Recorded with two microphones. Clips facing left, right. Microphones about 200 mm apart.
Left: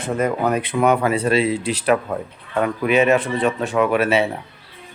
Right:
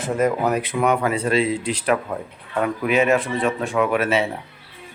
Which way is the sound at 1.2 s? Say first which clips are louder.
Left 2 dB; 70° left (ahead or behind).